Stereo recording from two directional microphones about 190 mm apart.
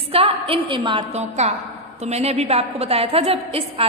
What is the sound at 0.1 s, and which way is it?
A woman's voice, 30° right (ahead or behind).